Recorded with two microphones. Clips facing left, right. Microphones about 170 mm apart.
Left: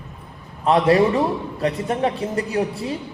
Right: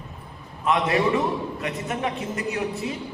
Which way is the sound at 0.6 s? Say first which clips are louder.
Left 6 dB; 35° left (ahead or behind).